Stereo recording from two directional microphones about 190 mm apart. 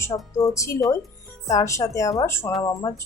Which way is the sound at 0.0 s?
15° left (ahead or behind).